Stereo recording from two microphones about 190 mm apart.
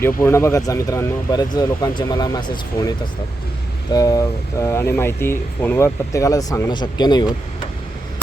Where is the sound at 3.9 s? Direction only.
20° left (ahead or behind).